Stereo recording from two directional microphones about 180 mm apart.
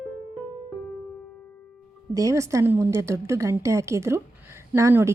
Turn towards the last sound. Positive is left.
turn(degrees=-15)  # may be behind; listen again after turning